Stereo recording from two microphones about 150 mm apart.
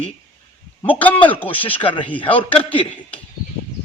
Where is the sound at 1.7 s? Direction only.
35° left (ahead or behind).